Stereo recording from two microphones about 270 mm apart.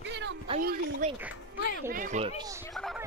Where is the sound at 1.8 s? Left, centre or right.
Right.